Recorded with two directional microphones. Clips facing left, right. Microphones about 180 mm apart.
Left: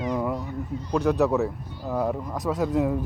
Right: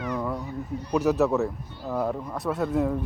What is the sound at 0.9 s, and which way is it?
Speech, 5° right (ahead or behind).